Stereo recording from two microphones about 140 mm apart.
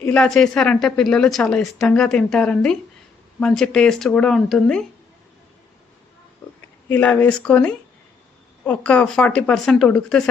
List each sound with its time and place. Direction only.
0.0 s a woman's voice: 5° left (ahead or behind)
6.8 s speech: 10° left (ahead or behind)